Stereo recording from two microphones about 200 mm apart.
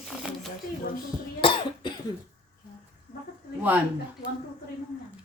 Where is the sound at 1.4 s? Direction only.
25° left (ahead or behind).